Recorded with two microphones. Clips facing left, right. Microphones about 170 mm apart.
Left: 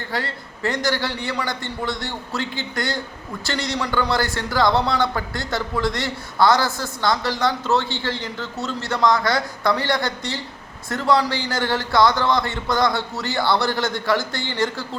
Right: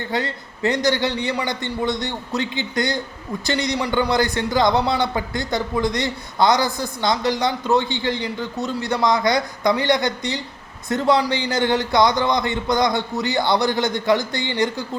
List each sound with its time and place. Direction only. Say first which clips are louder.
0.1 s a man's voice: right 2 dB; 20° right (ahead or behind)